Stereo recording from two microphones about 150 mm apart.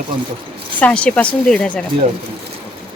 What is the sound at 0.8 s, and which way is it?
A woman's voice, 10° left (ahead or behind).